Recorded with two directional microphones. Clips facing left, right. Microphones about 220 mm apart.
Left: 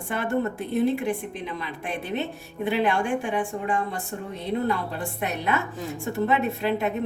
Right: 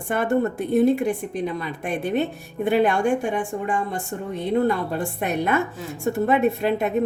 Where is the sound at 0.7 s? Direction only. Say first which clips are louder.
Right 5 dB; 50° right (ahead or behind).